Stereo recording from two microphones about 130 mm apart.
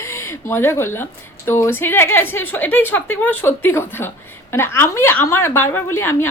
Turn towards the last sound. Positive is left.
turn(degrees=20)  # may be behind; listen again after turning